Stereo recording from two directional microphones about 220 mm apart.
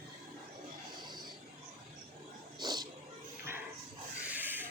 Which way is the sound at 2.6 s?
20° right (ahead or behind).